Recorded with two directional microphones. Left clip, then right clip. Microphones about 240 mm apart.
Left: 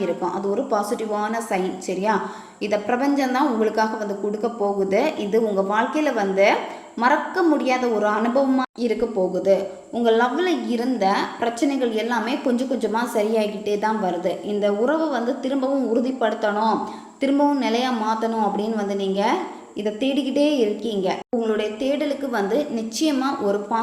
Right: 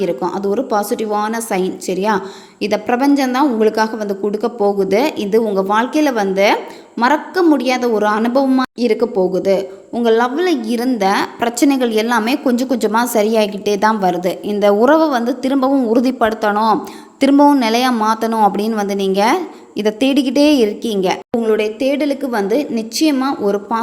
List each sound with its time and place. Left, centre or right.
0.0 s a woman's voice: right